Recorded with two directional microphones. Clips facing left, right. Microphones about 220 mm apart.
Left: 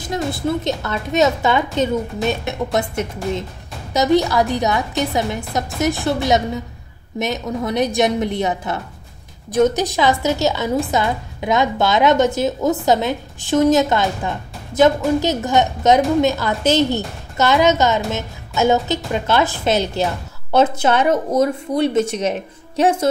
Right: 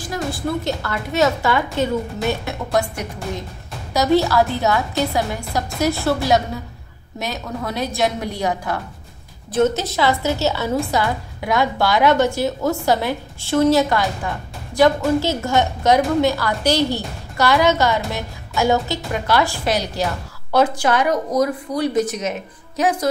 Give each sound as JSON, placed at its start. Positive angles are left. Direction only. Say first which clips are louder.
{"t": 0.0, "sound": "a woman's voice", "louder": "left 3 dB", "side_deg": 20}